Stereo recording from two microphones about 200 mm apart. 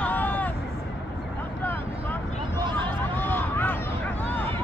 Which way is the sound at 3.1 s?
10° left (ahead or behind).